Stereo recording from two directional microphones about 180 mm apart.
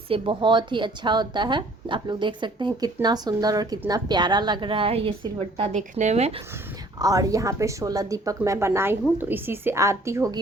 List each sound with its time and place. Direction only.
0.1 s a woman's voice: 30° right (ahead or behind)
5.7 s speech: 40° right (ahead or behind)
7.0 s speech: 20° right (ahead or behind)